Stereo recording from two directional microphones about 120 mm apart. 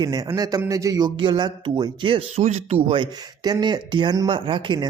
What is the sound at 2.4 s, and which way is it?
Speech, 60° right (ahead or behind).